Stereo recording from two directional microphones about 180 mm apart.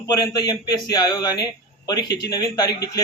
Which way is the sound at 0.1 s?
20° left (ahead or behind).